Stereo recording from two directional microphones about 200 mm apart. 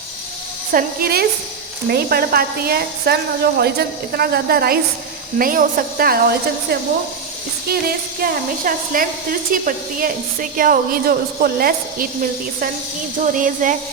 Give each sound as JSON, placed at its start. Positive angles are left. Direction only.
{"t": 0.7, "sound": "a woman's voice", "side_deg": -45}
{"t": 7.7, "sound": "a woman's voice", "side_deg": -50}
{"t": 13.2, "sound": "speech", "side_deg": -40}